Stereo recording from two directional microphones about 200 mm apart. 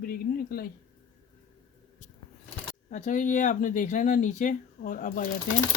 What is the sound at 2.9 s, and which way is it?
Speech, 40° left (ahead or behind).